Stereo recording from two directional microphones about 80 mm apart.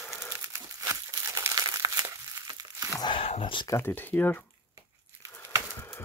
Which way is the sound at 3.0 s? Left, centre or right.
Left.